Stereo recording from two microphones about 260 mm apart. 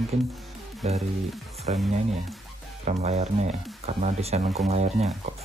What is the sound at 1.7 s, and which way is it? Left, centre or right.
Speech, right.